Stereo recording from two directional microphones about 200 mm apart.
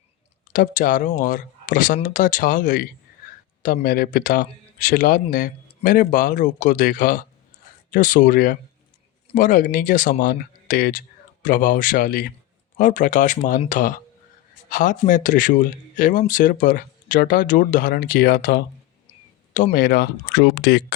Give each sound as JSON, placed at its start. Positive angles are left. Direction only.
{"t": 0.5, "sound": "speech", "side_deg": 40}